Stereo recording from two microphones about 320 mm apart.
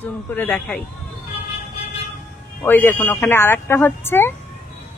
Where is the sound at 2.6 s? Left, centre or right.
Centre.